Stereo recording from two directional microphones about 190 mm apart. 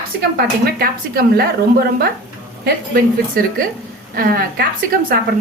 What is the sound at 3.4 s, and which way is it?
A woman's voice, 50° right (ahead or behind).